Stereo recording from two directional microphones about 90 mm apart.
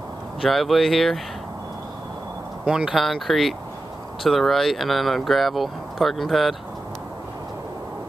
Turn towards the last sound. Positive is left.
turn(degrees=0)  # may be behind; listen again after turning